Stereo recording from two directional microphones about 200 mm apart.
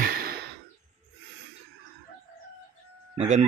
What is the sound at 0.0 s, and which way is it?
Sigh, 50° right (ahead or behind).